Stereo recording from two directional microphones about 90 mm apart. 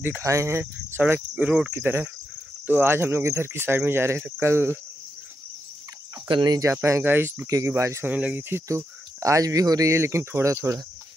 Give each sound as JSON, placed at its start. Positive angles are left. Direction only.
{"t": 0.2, "sound": "speech", "side_deg": -35}
{"t": 6.2, "sound": "cricket", "side_deg": -55}
{"t": 6.6, "sound": "speech", "side_deg": -30}
{"t": 7.4, "sound": "speech", "side_deg": -35}
{"t": 8.1, "sound": "speech", "side_deg": -15}